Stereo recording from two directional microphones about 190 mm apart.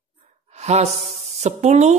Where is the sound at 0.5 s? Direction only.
35° right (ahead or behind).